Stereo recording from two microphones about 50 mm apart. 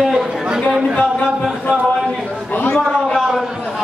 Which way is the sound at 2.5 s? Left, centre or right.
Left.